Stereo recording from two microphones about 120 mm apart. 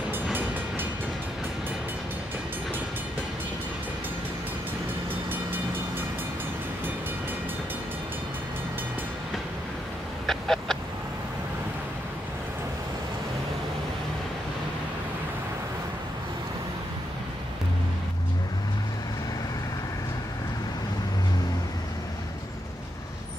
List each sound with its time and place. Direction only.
0.1 s train: 15° right (ahead or behind)
5.3 s train: 15° right (ahead or behind)
10.2 s a sound: 5° left (ahead or behind)